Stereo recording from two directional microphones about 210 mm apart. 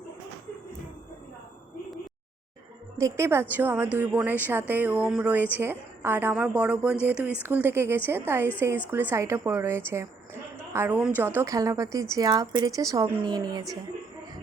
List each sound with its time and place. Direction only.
3.0 s a woman's voice: 10° right (ahead or behind)